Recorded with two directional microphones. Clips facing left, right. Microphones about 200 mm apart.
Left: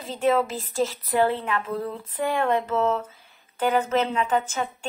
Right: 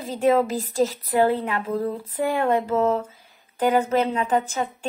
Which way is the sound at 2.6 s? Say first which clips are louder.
Right 3 dB; 30° right (ahead or behind).